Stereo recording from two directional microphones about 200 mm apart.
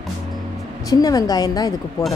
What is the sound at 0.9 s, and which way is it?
Speech, 15° left (ahead or behind).